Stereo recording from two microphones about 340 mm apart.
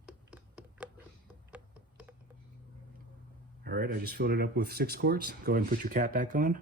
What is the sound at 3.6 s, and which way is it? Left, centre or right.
Speech, right.